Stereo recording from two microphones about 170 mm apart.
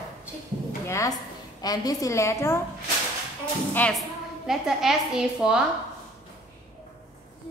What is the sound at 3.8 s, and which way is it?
Speech, 10° left (ahead or behind).